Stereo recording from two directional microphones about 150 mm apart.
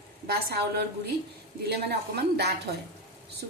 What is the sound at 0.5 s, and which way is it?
A woman's voice, 90° right.